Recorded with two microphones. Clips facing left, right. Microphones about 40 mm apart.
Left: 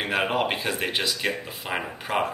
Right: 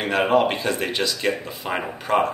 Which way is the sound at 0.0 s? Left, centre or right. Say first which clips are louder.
Right 6 dB; centre.